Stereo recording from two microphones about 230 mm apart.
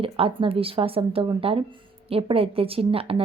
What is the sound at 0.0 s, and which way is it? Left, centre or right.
A woman's voice, right.